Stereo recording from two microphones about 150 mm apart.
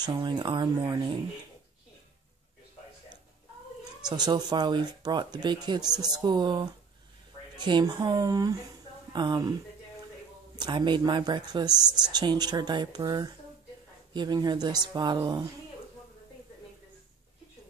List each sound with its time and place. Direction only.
0.0 s speech: 30° right (ahead or behind)
4.0 s speech: 30° right (ahead or behind)
10.6 s speech: 30° right (ahead or behind)